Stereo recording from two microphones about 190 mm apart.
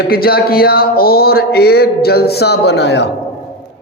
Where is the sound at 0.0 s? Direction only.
55° left (ahead or behind).